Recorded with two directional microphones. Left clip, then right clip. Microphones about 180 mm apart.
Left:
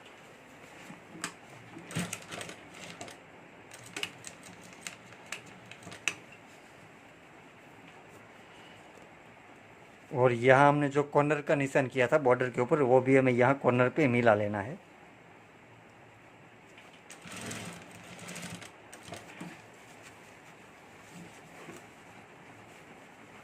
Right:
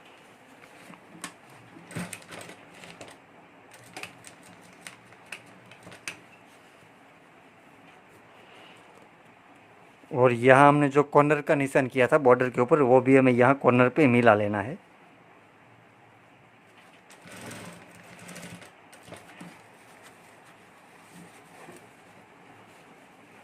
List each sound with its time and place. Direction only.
10.1 s speech: 30° right (ahead or behind)